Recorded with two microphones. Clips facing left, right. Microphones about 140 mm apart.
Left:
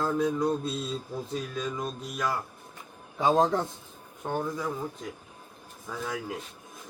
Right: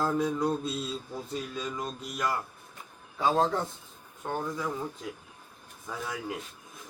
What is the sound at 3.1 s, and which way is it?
Speech, 20° left (ahead or behind).